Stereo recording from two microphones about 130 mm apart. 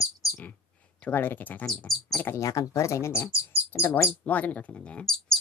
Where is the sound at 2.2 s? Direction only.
20° left (ahead or behind).